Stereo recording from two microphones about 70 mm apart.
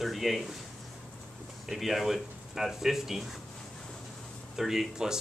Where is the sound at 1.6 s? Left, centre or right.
Centre.